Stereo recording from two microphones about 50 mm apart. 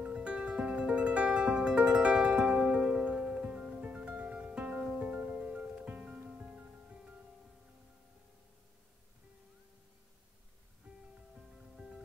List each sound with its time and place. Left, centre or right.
0.0 s music: right
5.4 s music: centre
11.7 s music: centre